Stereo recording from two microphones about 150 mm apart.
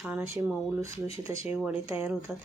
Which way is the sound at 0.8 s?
20° right (ahead or behind).